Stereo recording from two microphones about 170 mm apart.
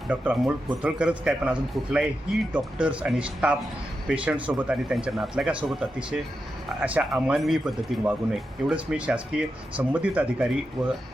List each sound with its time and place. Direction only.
0.1 s speech: 10° right (ahead or behind)